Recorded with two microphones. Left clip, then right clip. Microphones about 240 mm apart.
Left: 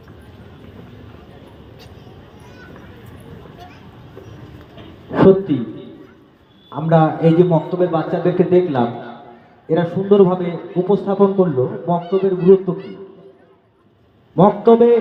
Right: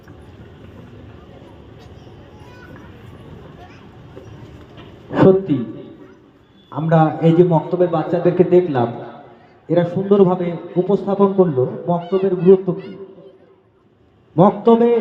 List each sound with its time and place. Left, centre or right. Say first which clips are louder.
5.1 s a man's voice: even; right
6.7 s a man's voice: left 1 dB; right
14.3 s a man's voice: left 1 dB; right